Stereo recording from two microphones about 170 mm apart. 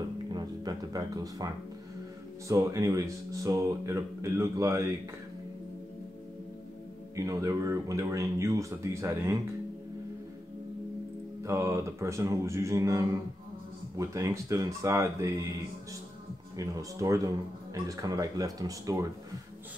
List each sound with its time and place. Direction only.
0.3 s music: 25° right (ahead or behind)
2.4 s speech: 20° right (ahead or behind)
7.2 s speech: 20° right (ahead or behind)
11.4 s speech: 15° right (ahead or behind)
16.5 s speech: 20° right (ahead or behind)